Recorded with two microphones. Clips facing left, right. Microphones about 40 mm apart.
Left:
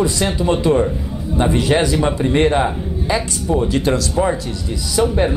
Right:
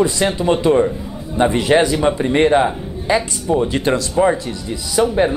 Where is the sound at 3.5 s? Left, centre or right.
Centre.